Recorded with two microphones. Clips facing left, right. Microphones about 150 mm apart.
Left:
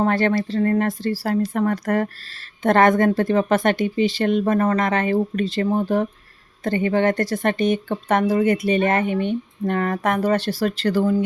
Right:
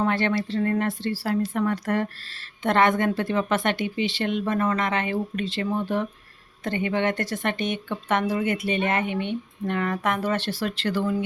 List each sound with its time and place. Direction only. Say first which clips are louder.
0.0 s speech: left 4 dB; 40° left (ahead or behind)